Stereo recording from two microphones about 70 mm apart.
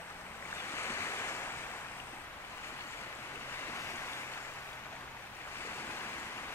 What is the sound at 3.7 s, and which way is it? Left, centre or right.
Waves, left.